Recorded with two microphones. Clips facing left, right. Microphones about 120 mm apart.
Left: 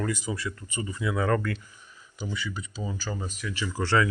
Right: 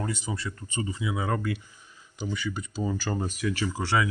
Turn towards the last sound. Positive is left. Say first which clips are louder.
# left 2 dB
turn(degrees=-10)  # may be behind; listen again after turning